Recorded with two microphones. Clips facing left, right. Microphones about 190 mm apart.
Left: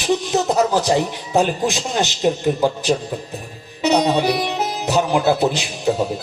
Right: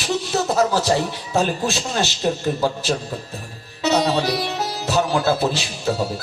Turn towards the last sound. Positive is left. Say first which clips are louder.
# left 3 dB
turn(degrees=20)  # may be behind; listen again after turning